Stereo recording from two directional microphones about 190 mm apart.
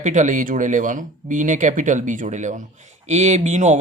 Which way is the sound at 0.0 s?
40° right (ahead or behind).